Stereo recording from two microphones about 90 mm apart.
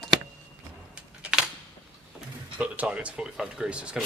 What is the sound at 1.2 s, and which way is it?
Camera, 10° right (ahead or behind).